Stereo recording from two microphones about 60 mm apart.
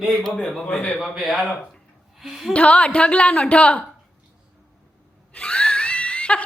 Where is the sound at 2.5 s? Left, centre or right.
Centre.